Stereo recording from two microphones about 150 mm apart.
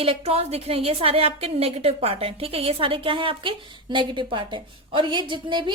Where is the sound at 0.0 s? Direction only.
40° right (ahead or behind).